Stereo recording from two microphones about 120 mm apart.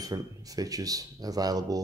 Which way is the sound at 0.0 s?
30° right (ahead or behind).